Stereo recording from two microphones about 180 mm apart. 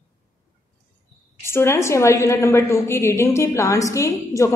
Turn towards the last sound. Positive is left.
turn(degrees=15)  # may be behind; listen again after turning